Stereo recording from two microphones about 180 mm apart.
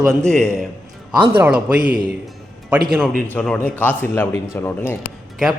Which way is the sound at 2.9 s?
Centre (ahead or behind).